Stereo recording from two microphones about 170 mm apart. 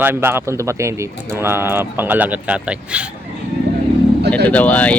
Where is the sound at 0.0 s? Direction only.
15° right (ahead or behind).